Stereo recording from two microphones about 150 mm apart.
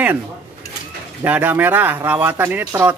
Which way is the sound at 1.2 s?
10° right (ahead or behind).